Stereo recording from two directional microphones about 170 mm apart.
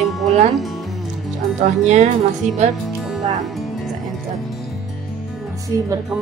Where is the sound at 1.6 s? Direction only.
40° right (ahead or behind).